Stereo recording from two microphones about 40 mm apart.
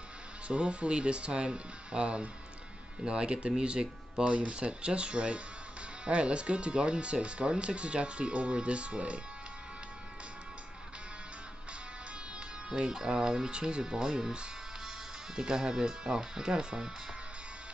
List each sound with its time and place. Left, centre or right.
0.5 s speech: right
12.6 s speech: right